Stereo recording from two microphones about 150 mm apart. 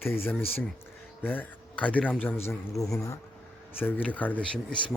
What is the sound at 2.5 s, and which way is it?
Speech, 20° left (ahead or behind).